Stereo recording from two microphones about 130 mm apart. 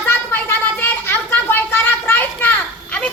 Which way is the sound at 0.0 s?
15° left (ahead or behind).